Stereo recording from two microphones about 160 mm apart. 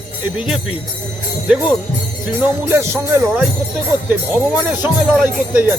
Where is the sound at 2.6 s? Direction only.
15° right (ahead or behind).